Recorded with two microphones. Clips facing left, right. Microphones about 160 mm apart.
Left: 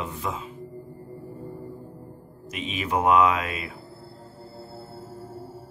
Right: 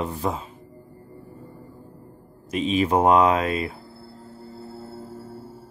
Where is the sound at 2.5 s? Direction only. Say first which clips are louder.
Right 7 dB; 35° right (ahead or behind).